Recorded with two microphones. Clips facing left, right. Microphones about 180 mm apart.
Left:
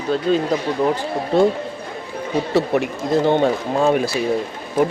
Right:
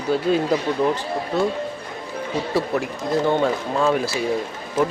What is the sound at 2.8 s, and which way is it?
Speech, 20° left (ahead or behind).